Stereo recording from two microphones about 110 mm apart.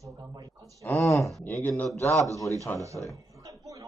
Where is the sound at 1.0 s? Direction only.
30° left (ahead or behind).